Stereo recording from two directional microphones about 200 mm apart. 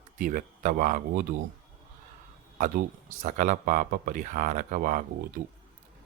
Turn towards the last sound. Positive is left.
turn(degrees=-40)  # may be behind; listen again after turning